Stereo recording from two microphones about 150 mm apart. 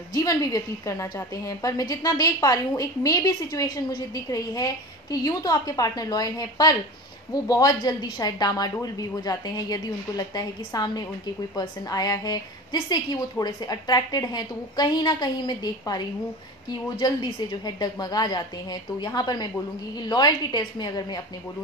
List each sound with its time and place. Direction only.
0.1 s a woman's voice: 25° left (ahead or behind)
17.0 s a woman's voice: 25° left (ahead or behind)